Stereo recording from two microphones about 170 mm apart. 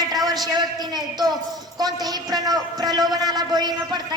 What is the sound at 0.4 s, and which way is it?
A man's voice, 25° right (ahead or behind).